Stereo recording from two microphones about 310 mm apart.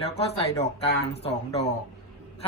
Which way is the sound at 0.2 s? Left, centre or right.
Centre.